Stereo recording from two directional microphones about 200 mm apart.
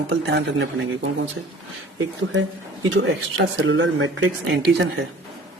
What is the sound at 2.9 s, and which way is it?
Speech, 70° right (ahead or behind).